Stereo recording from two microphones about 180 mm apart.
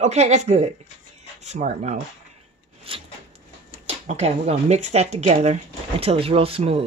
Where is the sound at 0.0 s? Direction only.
40° right (ahead or behind).